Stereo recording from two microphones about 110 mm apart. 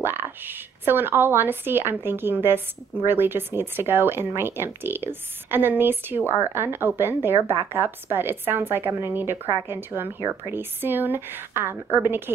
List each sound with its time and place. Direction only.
0.0 s speech: 20° right (ahead or behind)